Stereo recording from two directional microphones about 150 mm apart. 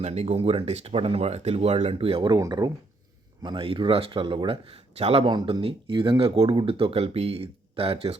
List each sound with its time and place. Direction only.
0.0 s speech: 45° right (ahead or behind)
2.3 s speech: 25° right (ahead or behind)